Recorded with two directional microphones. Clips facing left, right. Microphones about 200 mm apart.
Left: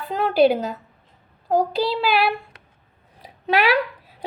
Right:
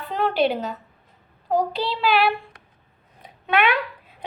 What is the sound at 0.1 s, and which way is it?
Speech, 45° left (ahead or behind).